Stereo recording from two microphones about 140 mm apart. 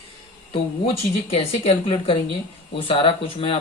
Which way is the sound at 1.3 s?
45° left (ahead or behind).